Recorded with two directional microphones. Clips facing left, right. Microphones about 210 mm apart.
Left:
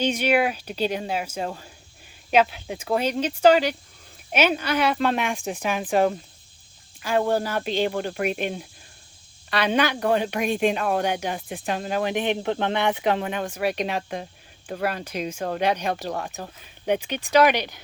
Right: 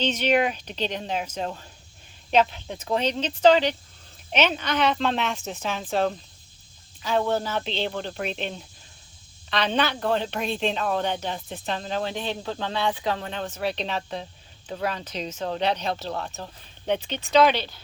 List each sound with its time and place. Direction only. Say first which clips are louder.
0.0 s speech: left 1 dB; 10° left (ahead or behind)